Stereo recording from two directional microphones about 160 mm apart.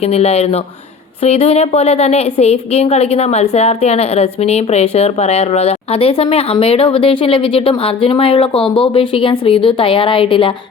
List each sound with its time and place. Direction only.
0.0 s a woman's voice: 40° left (ahead or behind)